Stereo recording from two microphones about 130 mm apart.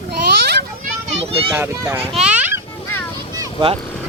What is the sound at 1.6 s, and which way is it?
Speech, 15° right (ahead or behind).